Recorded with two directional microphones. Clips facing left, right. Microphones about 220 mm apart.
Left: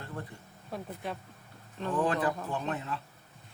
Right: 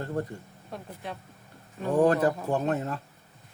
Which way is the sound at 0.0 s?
40° right (ahead or behind).